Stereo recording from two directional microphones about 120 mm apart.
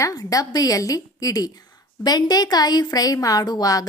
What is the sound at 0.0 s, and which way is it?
A woman's voice, 30° left (ahead or behind).